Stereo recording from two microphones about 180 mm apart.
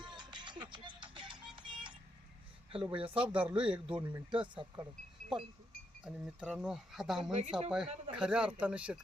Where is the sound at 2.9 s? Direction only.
30° right (ahead or behind).